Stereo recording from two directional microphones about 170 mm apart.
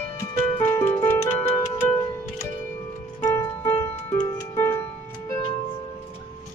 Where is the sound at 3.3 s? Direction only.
15° left (ahead or behind).